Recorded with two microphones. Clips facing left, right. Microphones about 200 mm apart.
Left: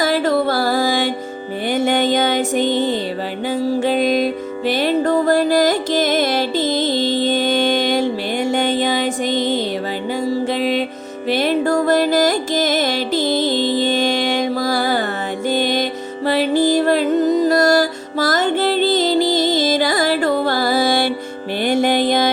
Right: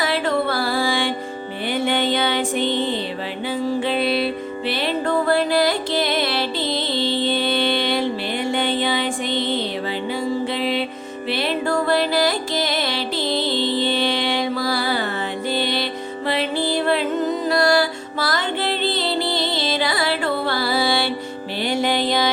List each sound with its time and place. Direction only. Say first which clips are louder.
0.0 s music: left 4 dB; 40° left (ahead or behind)